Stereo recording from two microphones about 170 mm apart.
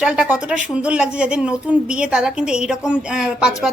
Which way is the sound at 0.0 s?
5° right (ahead or behind).